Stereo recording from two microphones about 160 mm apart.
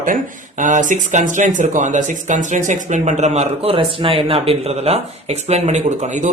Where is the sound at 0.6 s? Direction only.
50° right (ahead or behind).